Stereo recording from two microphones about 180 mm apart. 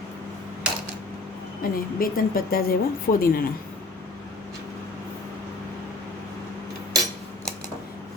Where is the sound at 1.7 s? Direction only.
55° left (ahead or behind).